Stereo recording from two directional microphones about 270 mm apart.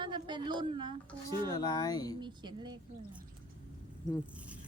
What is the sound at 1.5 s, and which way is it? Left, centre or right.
Speech, centre.